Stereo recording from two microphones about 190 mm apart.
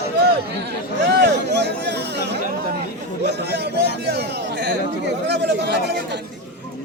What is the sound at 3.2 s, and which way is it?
A man's voice, 60° right (ahead or behind).